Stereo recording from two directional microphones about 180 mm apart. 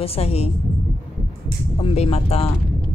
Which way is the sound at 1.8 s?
35° left (ahead or behind).